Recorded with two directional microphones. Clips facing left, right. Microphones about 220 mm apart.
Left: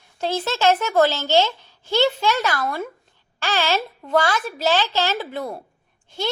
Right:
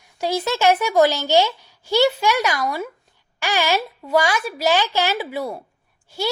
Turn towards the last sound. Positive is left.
turn(degrees=-10)  # may be behind; listen again after turning